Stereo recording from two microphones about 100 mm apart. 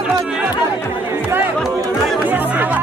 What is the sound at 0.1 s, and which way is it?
Music, 5° right (ahead or behind).